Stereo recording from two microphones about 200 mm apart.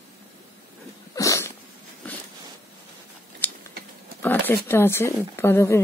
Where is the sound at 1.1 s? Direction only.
15° left (ahead or behind).